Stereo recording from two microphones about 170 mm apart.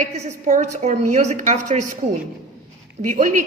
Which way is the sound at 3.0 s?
45° right (ahead or behind).